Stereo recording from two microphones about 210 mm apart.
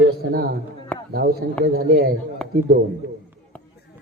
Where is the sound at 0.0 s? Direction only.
50° right (ahead or behind).